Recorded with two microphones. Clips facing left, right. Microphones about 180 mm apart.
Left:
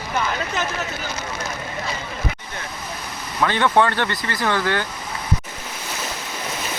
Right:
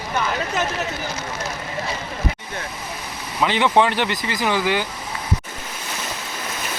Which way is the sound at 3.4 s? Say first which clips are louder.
Even; 15° right (ahead or behind).